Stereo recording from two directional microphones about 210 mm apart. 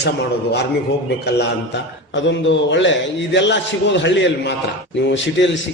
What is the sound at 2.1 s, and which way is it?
A man's voice, 60° left (ahead or behind).